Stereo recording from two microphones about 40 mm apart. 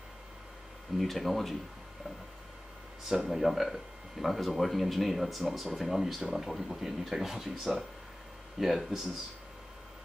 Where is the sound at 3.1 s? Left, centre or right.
Centre.